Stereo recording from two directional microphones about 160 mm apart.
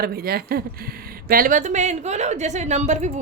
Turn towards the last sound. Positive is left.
turn(degrees=-45)  # may be behind; listen again after turning